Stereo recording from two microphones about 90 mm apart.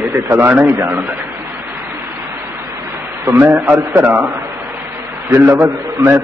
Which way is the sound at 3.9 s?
20° right (ahead or behind).